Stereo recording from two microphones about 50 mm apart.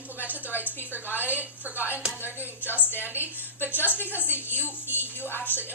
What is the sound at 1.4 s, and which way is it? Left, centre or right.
Speech, right.